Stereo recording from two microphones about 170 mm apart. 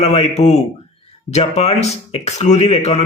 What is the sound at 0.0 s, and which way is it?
Speech, 40° left (ahead or behind).